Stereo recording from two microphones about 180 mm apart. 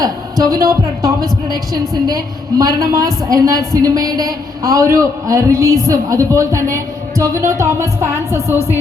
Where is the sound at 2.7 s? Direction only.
55° right (ahead or behind).